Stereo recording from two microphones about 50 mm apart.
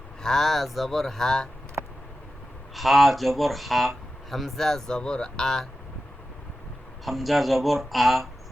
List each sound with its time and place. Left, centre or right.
0.2 s speech: centre
2.7 s speech: centre
4.9 s speech: centre
7.0 s speech: centre